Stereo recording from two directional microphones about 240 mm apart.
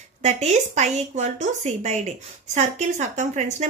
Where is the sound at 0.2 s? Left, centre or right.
Right.